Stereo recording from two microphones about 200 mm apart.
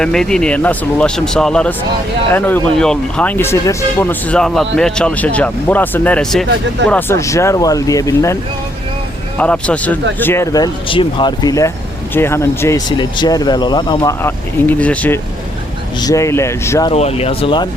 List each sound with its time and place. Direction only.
0.0 s speech: 5° left (ahead or behind)
9.4 s speech: 5° left (ahead or behind)
16.9 s speech: 30° left (ahead or behind)